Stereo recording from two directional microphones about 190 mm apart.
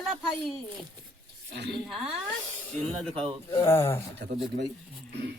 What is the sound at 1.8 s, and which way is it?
Speech, centre (ahead or behind).